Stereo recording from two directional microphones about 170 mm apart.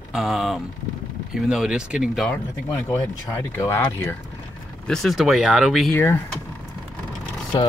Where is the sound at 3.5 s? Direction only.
15° left (ahead or behind).